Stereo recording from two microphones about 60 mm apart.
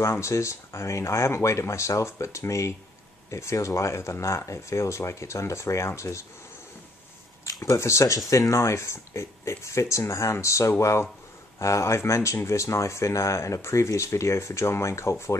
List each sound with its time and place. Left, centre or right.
0.0 s speech: left
7.6 s speech: left